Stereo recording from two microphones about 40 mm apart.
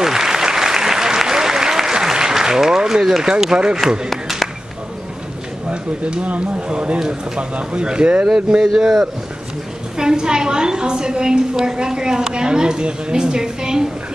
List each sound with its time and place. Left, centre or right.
0.0 s applause: centre
4.1 s a sound: centre
5.7 s a woman's voice: right
8.7 s a woman's voice: centre